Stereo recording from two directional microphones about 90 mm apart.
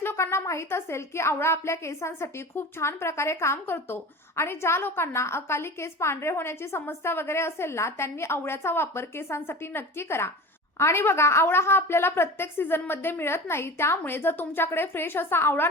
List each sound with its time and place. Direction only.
0.0 s a woman's voice: 30° left (ahead or behind)